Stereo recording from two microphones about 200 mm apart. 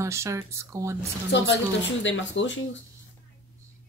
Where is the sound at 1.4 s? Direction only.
65° left (ahead or behind).